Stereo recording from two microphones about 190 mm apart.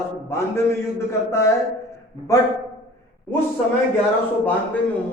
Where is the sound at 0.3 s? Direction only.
15° left (ahead or behind).